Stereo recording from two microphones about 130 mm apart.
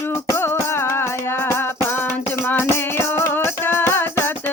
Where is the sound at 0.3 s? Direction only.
20° left (ahead or behind).